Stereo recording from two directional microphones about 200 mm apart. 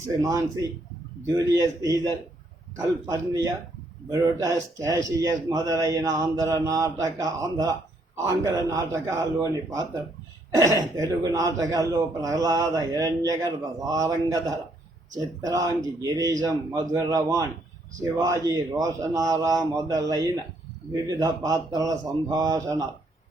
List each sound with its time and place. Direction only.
0.2 s a man's voice: 15° right (ahead or behind)